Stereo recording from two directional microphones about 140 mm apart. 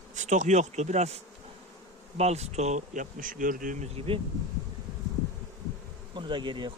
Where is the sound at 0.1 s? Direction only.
60° right (ahead or behind).